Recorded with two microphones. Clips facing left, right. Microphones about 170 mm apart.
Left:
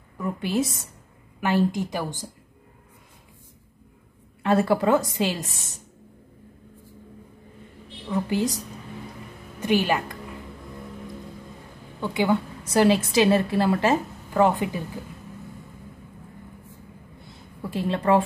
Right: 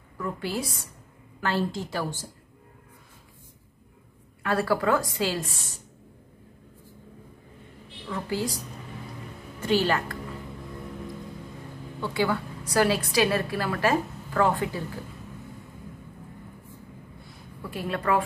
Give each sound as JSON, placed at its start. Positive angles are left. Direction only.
{"t": 0.2, "sound": "a woman's voice", "side_deg": 20}
{"t": 4.4, "sound": "a woman's voice", "side_deg": 20}
{"t": 8.1, "sound": "a woman's voice", "side_deg": 20}
{"t": 9.6, "sound": "a woman's voice", "side_deg": 15}
{"t": 12.0, "sound": "a woman's voice", "side_deg": 20}
{"t": 17.6, "sound": "a woman's voice", "side_deg": 25}